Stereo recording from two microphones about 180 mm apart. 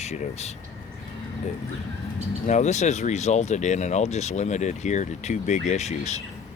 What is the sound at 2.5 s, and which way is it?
Speech, 40° left (ahead or behind).